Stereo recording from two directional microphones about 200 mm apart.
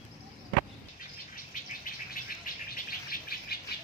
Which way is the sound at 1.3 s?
45° left (ahead or behind).